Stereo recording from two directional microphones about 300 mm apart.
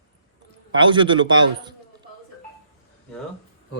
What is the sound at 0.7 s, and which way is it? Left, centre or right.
Speech, centre.